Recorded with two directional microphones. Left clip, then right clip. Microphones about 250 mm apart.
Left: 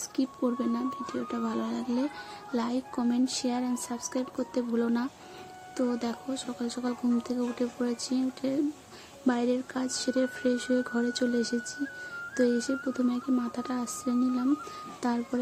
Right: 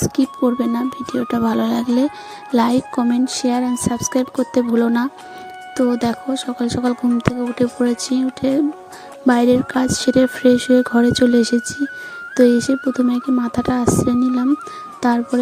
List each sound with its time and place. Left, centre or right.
0.0 s speech: right